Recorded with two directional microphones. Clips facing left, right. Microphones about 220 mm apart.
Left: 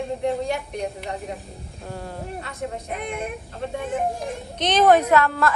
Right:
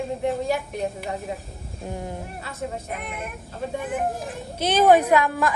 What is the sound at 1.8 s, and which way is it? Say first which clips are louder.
Speech: right 2 dB; 15° right (ahead or behind).